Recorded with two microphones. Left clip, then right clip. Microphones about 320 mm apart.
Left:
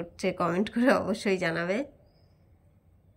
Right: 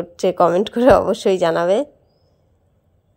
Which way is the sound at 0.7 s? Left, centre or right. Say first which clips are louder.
Right 12 dB; right.